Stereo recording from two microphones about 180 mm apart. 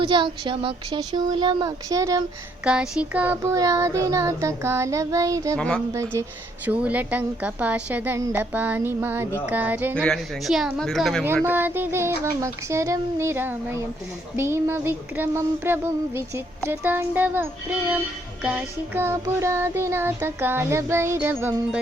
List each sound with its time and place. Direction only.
0.0 s speech: 25° right (ahead or behind)
2.6 s child singing: 5° right (ahead or behind)
5.5 s speech: 5° left (ahead or behind)
5.9 s child singing: 15° right (ahead or behind)
9.9 s speech: 5° left (ahead or behind)
11.4 s child singing: 10° right (ahead or behind)